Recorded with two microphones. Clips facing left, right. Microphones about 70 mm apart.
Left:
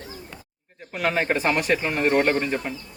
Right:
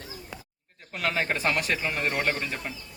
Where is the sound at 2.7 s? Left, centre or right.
Centre.